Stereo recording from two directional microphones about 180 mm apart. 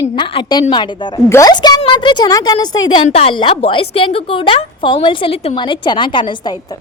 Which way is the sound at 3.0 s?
35° left (ahead or behind).